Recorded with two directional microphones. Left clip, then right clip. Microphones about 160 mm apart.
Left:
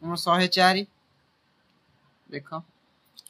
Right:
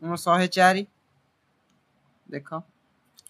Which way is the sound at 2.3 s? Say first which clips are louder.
Right 1 dB; 25° right (ahead or behind).